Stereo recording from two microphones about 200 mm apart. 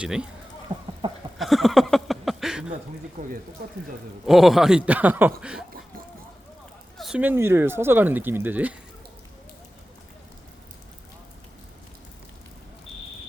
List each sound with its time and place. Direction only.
0.0 s speech: 5° right (ahead or behind)
1.0 s a sound: 25° right (ahead or behind)
1.4 s a sound: centre (ahead or behind)
3.2 s speech: 40° right (ahead or behind)
4.3 s speech: centre (ahead or behind)
7.0 s speech: 5° right (ahead or behind)